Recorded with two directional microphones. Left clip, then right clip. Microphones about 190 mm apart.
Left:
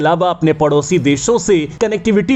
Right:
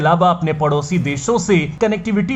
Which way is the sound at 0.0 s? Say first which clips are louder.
Left 1 dB; 40° left (ahead or behind).